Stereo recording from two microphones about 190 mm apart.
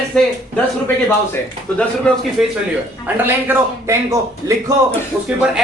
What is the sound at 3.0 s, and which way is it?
A woman's voice, 10° right (ahead or behind).